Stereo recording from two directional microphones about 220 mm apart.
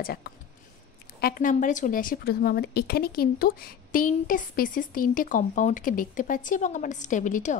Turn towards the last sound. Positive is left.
turn(degrees=35)  # may be behind; listen again after turning